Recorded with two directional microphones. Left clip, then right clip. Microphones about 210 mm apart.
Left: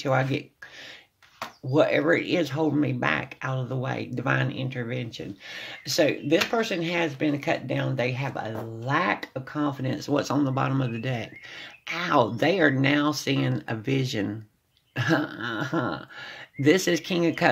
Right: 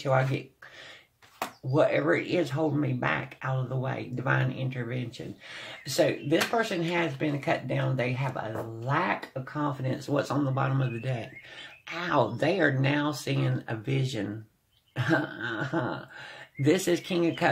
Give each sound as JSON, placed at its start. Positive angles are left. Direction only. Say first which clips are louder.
{"t": 0.0, "sound": "speech", "louder": "left 2 dB", "side_deg": 40}
{"t": 1.7, "sound": "speech", "louder": "left 3 dB", "side_deg": 40}